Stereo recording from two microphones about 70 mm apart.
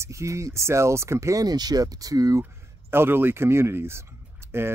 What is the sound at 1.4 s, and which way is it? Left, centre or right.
Speech, right.